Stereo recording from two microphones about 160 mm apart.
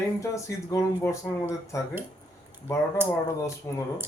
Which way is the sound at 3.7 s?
15° left (ahead or behind).